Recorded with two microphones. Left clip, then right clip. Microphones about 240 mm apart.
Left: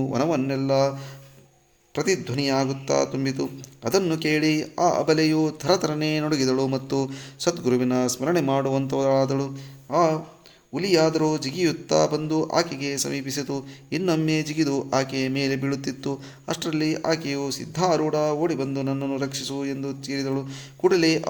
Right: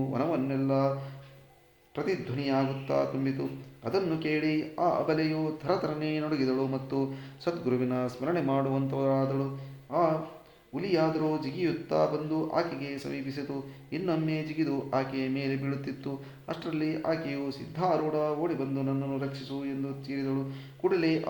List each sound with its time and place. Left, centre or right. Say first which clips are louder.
0.1 s speech: left 7 dB; left
2.0 s speech: left 8 dB; left